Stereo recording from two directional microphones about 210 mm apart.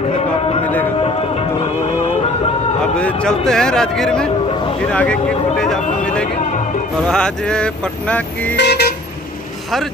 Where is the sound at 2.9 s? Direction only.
5° left (ahead or behind).